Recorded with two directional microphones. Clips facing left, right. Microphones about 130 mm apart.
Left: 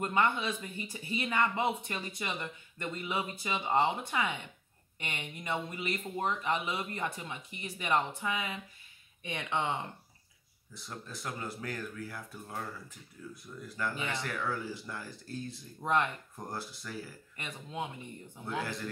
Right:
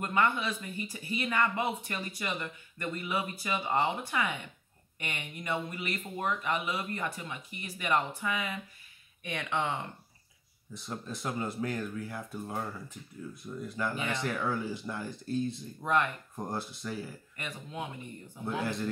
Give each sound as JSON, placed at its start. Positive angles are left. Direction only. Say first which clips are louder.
{"t": 0.0, "sound": "speech", "louder": "right 1 dB", "side_deg": 25}
{"t": 10.7, "sound": "speech", "louder": "right 5 dB", "side_deg": -20}
{"t": 15.8, "sound": "speech", "louder": "right 1 dB", "side_deg": 25}
{"t": 16.3, "sound": "speech", "louder": "right 8 dB", "side_deg": -20}
{"t": 17.4, "sound": "speech", "louder": "even", "side_deg": 25}
{"t": 18.4, "sound": "speech", "louder": "right 4 dB", "side_deg": -20}